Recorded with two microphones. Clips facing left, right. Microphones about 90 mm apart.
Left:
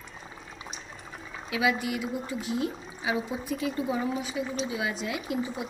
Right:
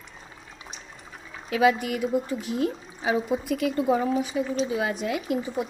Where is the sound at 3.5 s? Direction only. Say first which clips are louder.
Right 5 dB; 65° right (ahead or behind).